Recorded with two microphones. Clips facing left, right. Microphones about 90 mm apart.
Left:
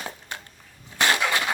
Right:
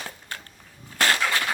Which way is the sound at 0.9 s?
20° left (ahead or behind).